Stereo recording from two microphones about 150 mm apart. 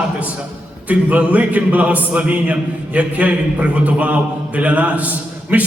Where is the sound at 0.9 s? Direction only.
10° right (ahead or behind).